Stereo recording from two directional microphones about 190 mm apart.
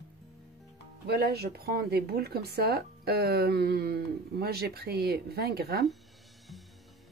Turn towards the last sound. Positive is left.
turn(degrees=-55)  # may be behind; listen again after turning